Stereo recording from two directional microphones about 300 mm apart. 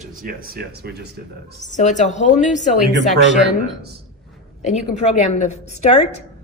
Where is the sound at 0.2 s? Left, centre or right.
Right.